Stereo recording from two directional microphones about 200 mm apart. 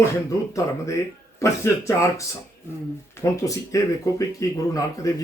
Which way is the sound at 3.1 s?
15° left (ahead or behind).